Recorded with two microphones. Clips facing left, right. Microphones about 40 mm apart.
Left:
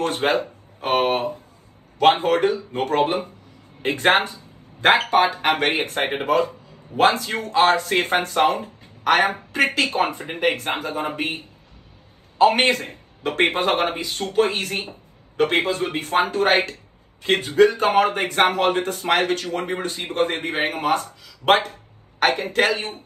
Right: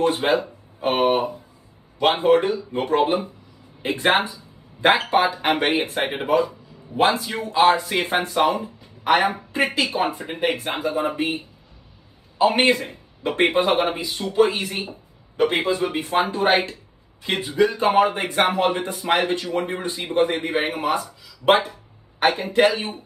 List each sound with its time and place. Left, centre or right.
0.0 s speech: left
4.8 s speech: left
5.9 s speech: left
6.2 s speech: left
10.2 s speech: left
12.4 s speech: left